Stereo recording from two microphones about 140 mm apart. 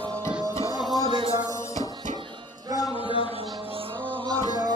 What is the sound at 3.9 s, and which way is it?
Music, 10° left (ahead or behind).